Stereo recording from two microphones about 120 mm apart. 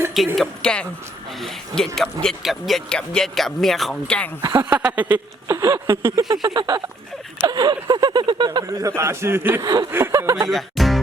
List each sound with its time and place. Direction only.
0.3 s speech: 5° left (ahead or behind)
4.5 s a sound: 15° right (ahead or behind)
5.5 s speech: 25° right (ahead or behind)
6.2 s speech: 35° right (ahead or behind)
10.5 s music: centre (ahead or behind)